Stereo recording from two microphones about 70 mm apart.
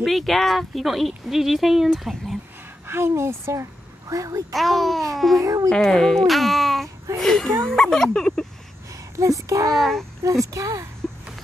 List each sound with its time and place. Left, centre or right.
0.0 s speech: centre
2.9 s a woman's voice: right
4.1 s speech: right
4.6 s speech: centre
5.4 s speech: right
5.7 s speech: centre
9.2 s speech: right
9.8 s speech: centre
10.2 s speech: right